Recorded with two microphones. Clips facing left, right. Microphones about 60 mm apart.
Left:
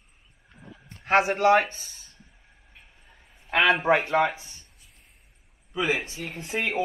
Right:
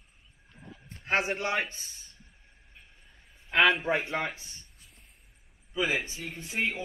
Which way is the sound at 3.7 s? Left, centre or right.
Left.